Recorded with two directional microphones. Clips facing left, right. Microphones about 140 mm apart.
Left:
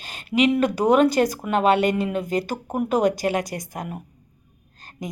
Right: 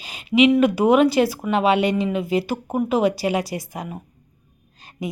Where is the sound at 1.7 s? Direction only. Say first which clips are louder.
Even; 45° left (ahead or behind).